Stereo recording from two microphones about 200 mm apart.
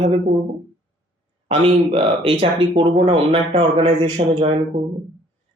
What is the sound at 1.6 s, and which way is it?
Speech, 30° right (ahead or behind).